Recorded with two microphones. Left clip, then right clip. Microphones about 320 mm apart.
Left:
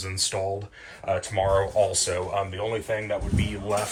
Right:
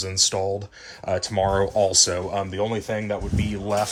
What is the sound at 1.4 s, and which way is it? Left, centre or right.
Speech, right.